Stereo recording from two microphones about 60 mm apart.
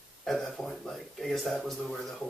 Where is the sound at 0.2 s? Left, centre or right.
Centre.